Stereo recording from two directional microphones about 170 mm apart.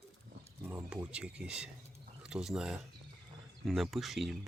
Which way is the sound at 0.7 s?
15° right (ahead or behind).